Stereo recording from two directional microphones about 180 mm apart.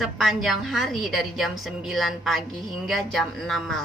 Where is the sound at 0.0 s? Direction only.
Centre (ahead or behind).